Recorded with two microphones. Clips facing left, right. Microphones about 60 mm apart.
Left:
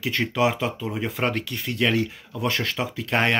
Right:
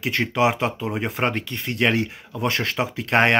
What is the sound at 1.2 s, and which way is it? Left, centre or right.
Speech, right.